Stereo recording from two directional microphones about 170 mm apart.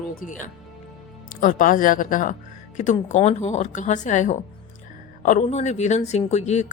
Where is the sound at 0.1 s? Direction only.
55° left (ahead or behind).